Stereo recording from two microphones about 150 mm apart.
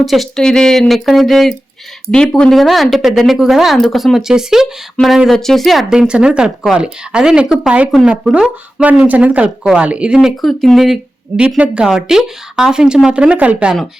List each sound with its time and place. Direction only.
0.0 s speech: centre (ahead or behind)